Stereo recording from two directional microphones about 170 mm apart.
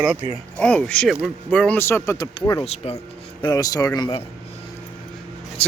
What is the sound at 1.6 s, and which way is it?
Speech, 10° left (ahead or behind).